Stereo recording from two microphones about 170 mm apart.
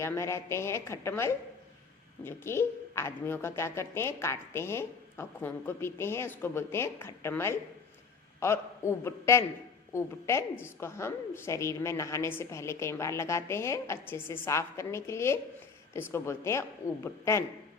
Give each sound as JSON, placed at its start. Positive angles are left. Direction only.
{"t": 0.0, "sound": "a woman's voice", "side_deg": 15}